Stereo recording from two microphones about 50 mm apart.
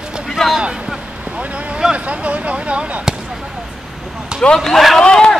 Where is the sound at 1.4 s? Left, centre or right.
Right.